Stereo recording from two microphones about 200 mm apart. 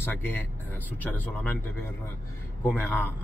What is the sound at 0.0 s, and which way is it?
Speech, 10° left (ahead or behind).